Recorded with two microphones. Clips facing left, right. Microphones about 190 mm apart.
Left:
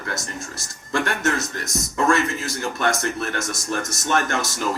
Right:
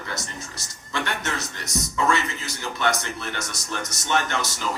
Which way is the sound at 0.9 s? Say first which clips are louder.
Left 6 dB; 50° left (ahead or behind).